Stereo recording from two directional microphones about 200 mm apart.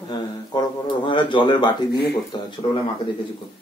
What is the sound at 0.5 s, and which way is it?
Speech, 20° left (ahead or behind).